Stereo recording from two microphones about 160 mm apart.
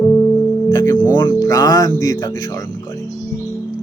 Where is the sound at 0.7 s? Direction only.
20° left (ahead or behind).